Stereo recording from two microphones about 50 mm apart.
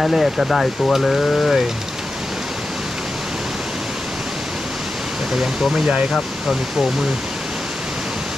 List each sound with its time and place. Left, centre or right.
0.0 s speech: centre
5.3 s speech: centre